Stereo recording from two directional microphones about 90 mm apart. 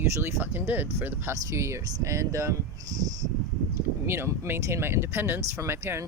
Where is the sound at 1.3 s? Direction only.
35° right (ahead or behind).